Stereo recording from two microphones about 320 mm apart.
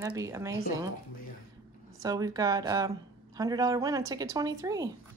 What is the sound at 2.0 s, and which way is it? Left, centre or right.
A woman's voice, centre.